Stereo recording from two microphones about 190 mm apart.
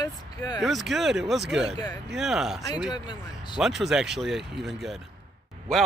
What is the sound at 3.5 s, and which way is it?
Speech, centre (ahead or behind).